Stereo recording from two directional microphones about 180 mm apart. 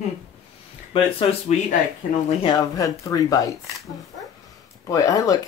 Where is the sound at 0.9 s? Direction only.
30° left (ahead or behind).